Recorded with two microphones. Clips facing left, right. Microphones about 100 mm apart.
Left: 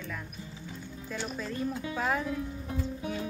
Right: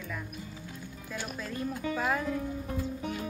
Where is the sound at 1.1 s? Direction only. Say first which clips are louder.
Left 2 dB; 10° right (ahead or behind).